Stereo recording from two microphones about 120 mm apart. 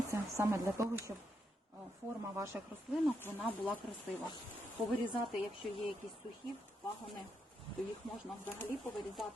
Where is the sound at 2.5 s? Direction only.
15° right (ahead or behind).